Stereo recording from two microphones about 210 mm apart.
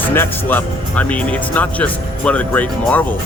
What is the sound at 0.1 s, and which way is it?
Speech, 10° left (ahead or behind).